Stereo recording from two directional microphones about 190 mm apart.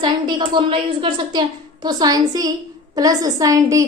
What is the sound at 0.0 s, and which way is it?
A woman's voice, 25° right (ahead or behind).